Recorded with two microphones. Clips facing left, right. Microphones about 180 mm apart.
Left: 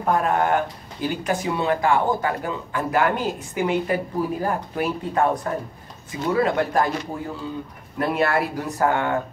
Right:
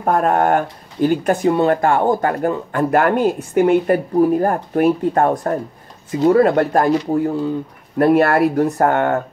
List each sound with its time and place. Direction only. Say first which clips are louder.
0.0 s speech: right 5 dB; 50° right (ahead or behind)
8.0 s speech: right 9 dB; 55° right (ahead or behind)